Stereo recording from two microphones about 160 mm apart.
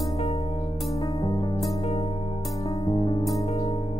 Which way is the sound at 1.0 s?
20° left (ahead or behind).